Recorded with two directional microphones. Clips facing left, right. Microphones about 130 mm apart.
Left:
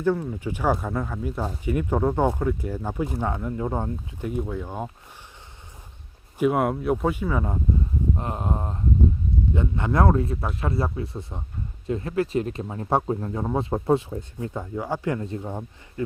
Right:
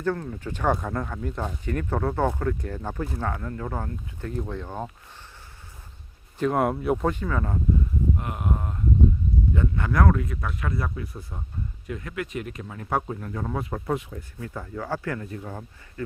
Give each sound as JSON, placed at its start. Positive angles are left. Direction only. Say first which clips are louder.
{"t": 0.0, "sound": "speech", "louder": "left 4 dB", "side_deg": 10}
{"t": 6.4, "sound": "speech", "louder": "left 2 dB", "side_deg": 5}
{"t": 8.1, "sound": "speech", "louder": "left 2 dB", "side_deg": 30}